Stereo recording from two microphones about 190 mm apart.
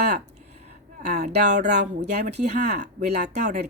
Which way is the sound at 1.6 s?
60° right (ahead or behind).